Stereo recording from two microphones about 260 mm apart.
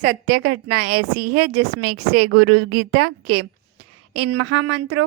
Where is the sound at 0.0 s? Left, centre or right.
Right.